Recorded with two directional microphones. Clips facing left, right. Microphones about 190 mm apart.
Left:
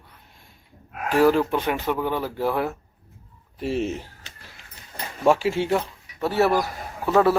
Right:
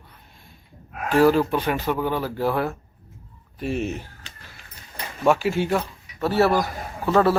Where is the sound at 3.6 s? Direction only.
30° left (ahead or behind).